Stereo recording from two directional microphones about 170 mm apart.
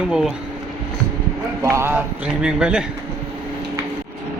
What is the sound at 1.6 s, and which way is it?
A man's voice, 15° right (ahead or behind).